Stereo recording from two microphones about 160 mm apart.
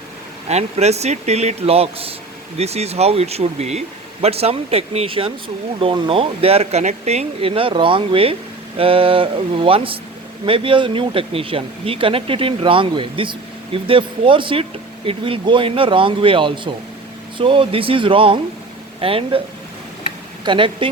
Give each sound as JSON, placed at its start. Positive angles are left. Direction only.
{"t": 0.4, "sound": "speech", "side_deg": -40}
{"t": 20.4, "sound": "speech", "side_deg": -30}